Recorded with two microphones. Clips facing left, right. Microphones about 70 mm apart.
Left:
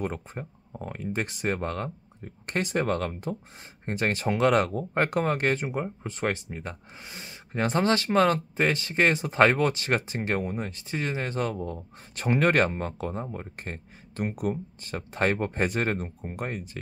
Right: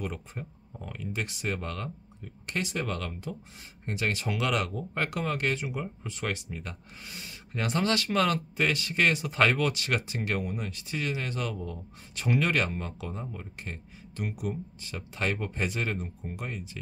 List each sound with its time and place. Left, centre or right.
0.0 s speech: left